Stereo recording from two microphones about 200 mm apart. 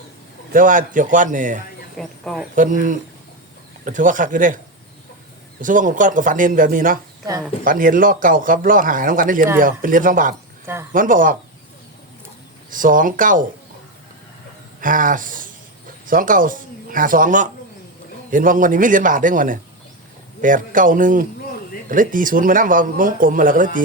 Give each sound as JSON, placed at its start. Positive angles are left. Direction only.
{"t": 0.5, "sound": "speech", "side_deg": -40}
{"t": 2.0, "sound": "speech", "side_deg": 0}
{"t": 2.6, "sound": "speech", "side_deg": -40}
{"t": 12.7, "sound": "speech", "side_deg": -40}
{"t": 14.8, "sound": "speech", "side_deg": -40}